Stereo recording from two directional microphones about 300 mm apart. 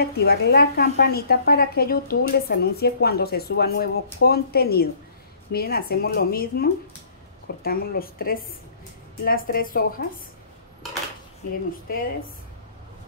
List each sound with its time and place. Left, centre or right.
0.0 s a woman's voice: left